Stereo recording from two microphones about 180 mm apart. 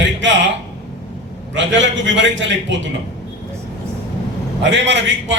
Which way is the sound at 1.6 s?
90° right.